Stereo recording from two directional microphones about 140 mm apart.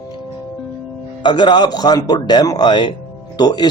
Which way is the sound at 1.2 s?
35° left (ahead or behind).